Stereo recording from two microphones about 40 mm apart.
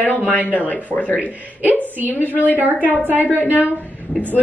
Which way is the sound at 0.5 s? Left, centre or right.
Left.